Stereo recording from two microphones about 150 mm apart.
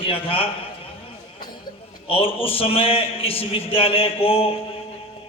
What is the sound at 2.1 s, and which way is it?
A man's voice, 40° left (ahead or behind).